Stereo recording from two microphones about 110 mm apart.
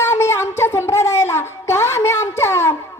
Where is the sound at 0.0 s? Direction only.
25° left (ahead or behind).